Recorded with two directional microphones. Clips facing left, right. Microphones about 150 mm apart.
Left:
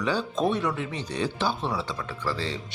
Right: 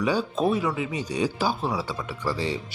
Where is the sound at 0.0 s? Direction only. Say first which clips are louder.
Right 2 dB; 10° right (ahead or behind).